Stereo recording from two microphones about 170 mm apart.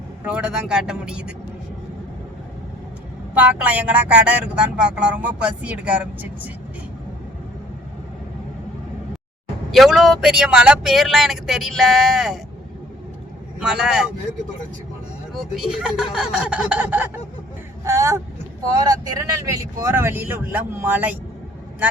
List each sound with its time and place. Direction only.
0.3 s speech: 5° right (ahead or behind)
3.3 s speech: 10° right (ahead or behind)
9.7 s speech: centre (ahead or behind)
13.6 s speech: 5° right (ahead or behind)
15.5 s speech: 5° right (ahead or behind)
17.8 s vehicle: 15° right (ahead or behind)
18.7 s speech: 20° right (ahead or behind)